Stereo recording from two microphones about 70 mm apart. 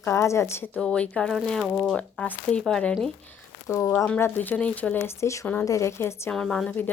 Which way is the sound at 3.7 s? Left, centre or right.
Left.